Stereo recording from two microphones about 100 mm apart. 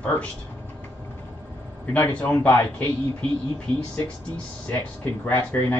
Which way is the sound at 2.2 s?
15° left (ahead or behind).